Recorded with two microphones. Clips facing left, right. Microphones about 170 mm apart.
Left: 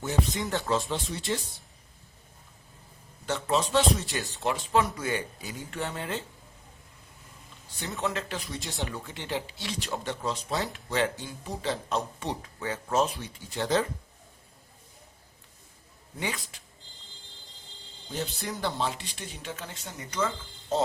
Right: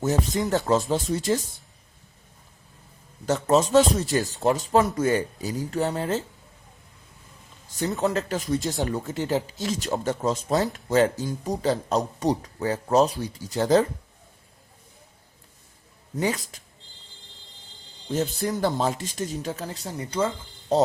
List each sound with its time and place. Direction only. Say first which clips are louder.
0.5 s speech: right 7 dB; 40° right (ahead or behind)
3.2 s speech: right 7 dB; 45° right (ahead or behind)
4.2 s speech: right 8 dB; centre (ahead or behind)
4.4 s speech: right 5 dB; 40° right (ahead or behind)
7.9 s speech: right 5 dB; 40° right (ahead or behind)
16.1 s speech: right 8 dB; 40° right (ahead or behind)
18.1 s speech: right 8 dB; 45° right (ahead or behind)